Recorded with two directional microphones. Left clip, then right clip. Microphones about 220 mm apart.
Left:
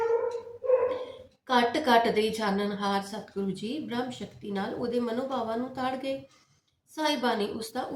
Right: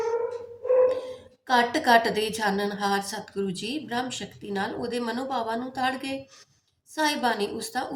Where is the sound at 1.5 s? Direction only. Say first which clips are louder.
Right 3 dB; 50° right (ahead or behind).